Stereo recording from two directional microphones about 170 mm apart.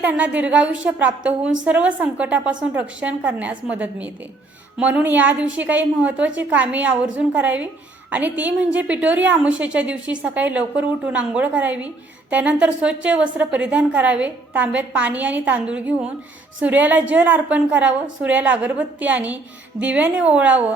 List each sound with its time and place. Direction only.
0.0 s a woman's voice: 10° right (ahead or behind)